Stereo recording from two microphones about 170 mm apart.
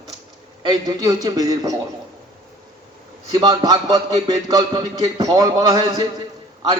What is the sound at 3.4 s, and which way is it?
A man's voice, 25° right (ahead or behind).